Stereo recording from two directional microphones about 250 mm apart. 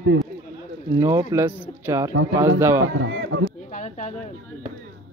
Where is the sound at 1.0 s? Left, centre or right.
Centre.